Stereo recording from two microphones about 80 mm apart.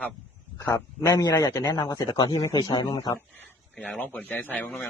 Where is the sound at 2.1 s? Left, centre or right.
Left.